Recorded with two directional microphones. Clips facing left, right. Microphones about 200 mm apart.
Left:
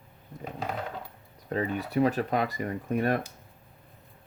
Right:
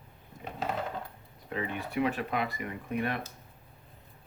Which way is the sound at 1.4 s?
40° left (ahead or behind).